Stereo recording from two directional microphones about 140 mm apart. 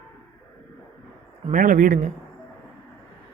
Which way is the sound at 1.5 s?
70° right (ahead or behind).